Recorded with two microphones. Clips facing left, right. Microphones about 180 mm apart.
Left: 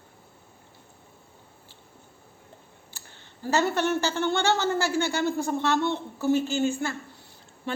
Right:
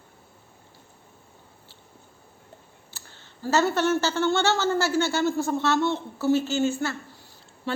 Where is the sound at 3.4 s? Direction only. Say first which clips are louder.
Right 2 dB; 15° left (ahead or behind).